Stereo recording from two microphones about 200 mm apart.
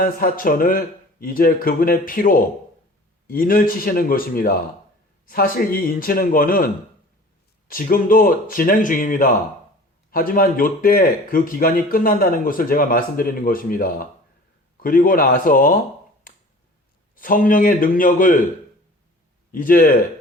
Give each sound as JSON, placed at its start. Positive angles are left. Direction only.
{"t": 0.0, "sound": "speech", "side_deg": 45}
{"t": 7.7, "sound": "speech", "side_deg": 45}
{"t": 16.3, "sound": "a sound", "side_deg": 45}
{"t": 17.2, "sound": "speech", "side_deg": 45}
{"t": 19.5, "sound": "speech", "side_deg": 45}